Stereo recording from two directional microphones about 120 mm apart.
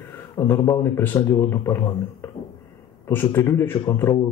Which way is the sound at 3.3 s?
20° left (ahead or behind).